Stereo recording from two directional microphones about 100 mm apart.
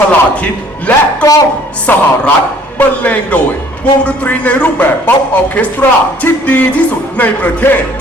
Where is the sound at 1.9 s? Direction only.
20° left (ahead or behind).